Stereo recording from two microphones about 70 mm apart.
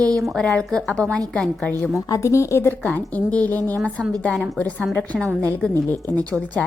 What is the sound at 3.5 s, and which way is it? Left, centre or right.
Speech, right.